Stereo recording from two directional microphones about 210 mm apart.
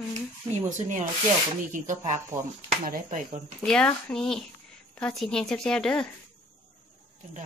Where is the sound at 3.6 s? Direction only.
5° left (ahead or behind).